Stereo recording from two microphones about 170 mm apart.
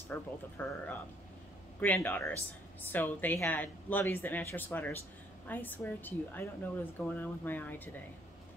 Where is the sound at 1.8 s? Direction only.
10° left (ahead or behind).